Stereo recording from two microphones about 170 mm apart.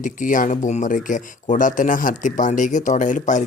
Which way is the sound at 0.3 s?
50° left (ahead or behind).